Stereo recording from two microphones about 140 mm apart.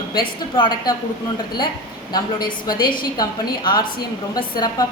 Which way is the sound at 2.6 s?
30° left (ahead or behind).